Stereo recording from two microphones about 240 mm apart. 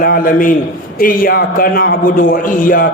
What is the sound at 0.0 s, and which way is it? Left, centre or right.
A man's voice, left.